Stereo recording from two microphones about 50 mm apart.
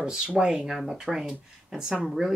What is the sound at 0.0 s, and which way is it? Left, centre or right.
Speech, centre.